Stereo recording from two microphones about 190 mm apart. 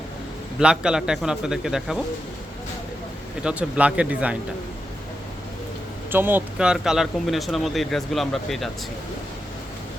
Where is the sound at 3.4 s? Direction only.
5° right (ahead or behind).